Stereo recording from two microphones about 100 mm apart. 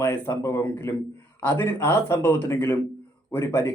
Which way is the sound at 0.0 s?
25° left (ahead or behind).